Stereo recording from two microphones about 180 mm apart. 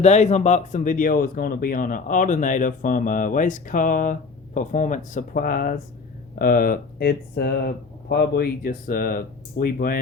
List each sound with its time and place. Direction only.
0.0 s speech: 40° left (ahead or behind)